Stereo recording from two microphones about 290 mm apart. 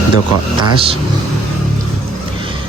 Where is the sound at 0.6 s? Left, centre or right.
Centre.